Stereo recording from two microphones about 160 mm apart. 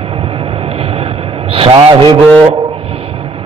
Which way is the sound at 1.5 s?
35° right (ahead or behind).